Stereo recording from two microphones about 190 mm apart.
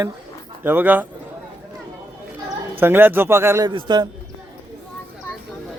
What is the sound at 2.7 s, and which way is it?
A man's voice, 10° right (ahead or behind).